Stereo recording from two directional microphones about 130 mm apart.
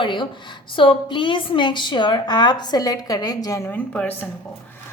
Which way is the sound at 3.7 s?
10° left (ahead or behind).